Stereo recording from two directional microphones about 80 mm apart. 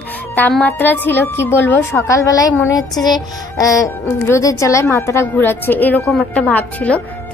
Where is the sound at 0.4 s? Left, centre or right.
Centre; by 5.3 s left.